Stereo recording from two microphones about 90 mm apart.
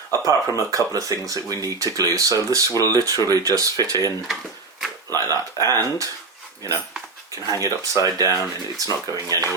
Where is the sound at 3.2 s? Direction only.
45° right (ahead or behind).